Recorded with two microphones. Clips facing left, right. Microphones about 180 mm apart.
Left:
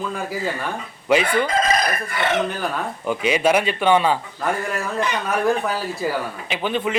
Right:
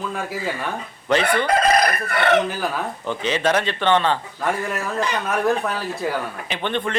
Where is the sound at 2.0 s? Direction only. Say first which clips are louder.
Right 4 dB; 65° right (ahead or behind).